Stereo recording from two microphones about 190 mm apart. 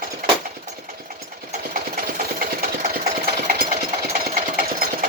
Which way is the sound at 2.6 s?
55° right (ahead or behind).